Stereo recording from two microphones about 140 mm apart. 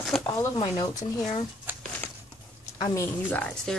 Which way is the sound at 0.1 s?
Centre (ahead or behind).